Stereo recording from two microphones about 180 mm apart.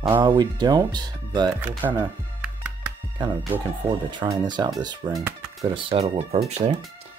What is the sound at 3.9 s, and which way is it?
Speech, 25° right (ahead or behind).